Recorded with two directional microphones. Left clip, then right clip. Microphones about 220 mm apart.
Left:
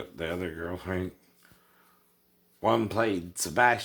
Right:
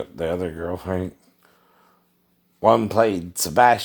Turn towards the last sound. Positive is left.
turn(degrees=-40)  # may be behind; listen again after turning